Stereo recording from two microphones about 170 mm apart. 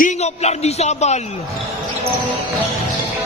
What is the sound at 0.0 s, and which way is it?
A man's voice, 40° left (ahead or behind).